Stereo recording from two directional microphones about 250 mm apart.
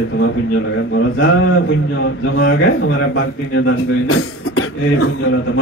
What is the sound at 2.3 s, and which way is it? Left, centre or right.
A man's voice, left.